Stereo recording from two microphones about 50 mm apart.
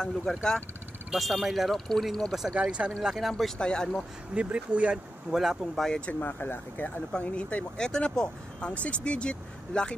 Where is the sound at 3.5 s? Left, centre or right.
Centre.